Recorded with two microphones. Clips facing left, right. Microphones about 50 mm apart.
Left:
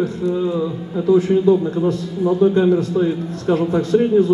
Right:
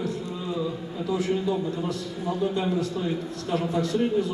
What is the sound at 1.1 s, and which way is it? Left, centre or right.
A man's voice, left.